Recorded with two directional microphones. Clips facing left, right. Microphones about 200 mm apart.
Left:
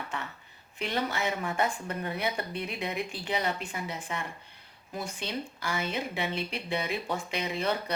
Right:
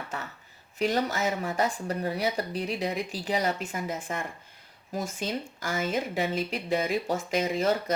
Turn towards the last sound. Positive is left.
turn(degrees=-45)  # may be behind; listen again after turning